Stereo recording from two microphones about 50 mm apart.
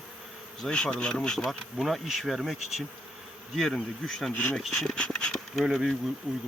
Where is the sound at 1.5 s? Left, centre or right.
Centre.